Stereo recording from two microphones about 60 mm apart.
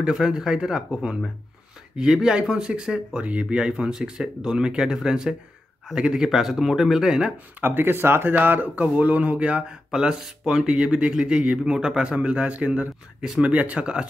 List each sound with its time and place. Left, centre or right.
0.0 s speech: centre
7.6 s speech: right
8.4 s speech: right